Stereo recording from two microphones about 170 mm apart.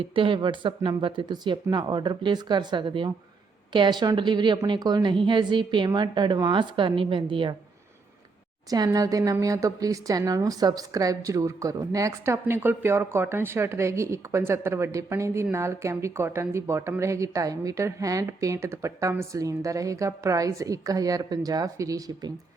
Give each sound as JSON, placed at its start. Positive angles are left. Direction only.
{"t": 0.0, "sound": "speech", "side_deg": -30}
{"t": 8.7, "sound": "a woman's voice", "side_deg": -20}